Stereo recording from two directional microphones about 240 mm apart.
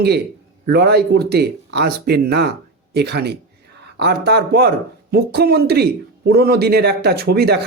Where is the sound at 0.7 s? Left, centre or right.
Right.